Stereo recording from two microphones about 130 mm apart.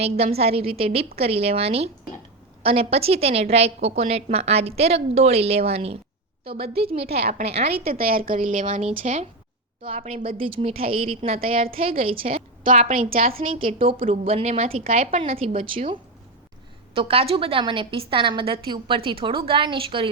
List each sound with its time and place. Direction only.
0.0 s a woman's voice: 50° right (ahead or behind)
8.2 s a woman's voice: 90° right; by 8.9 s 75° right (ahead or behind)
8.9 s a woman's voice: 55° right (ahead or behind)
12.6 s a woman's voice: 70° right (ahead or behind)
13.0 s a woman's voice: 45° right (ahead or behind)
15.2 s a woman's voice: 50° right (ahead or behind)